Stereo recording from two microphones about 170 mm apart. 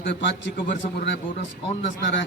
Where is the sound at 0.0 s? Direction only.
90° left.